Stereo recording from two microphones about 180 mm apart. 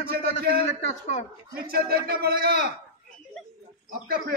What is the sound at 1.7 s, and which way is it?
Speech, 60° right (ahead or behind).